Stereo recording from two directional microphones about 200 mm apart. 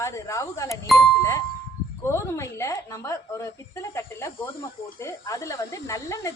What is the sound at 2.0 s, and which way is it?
A woman's voice, 15° left (ahead or behind).